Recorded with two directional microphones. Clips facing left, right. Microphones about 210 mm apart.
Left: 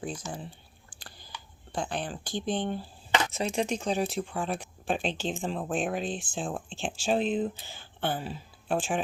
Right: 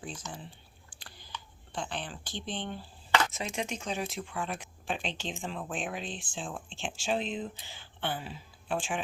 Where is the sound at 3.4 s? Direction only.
35° left (ahead or behind).